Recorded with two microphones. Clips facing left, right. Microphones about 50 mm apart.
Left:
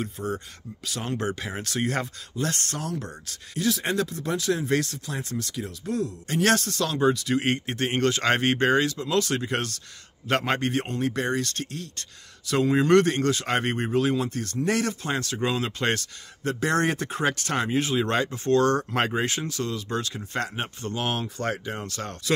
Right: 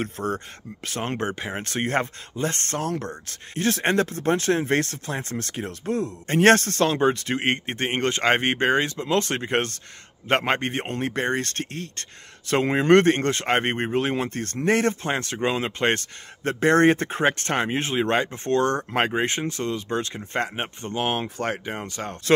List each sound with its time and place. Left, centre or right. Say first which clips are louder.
0.0 s speech: right 3 dB; right
0.8 s speech: right 2 dB; right
21.4 s speech: right 1 dB; right
21.7 s speech: right 2 dB; right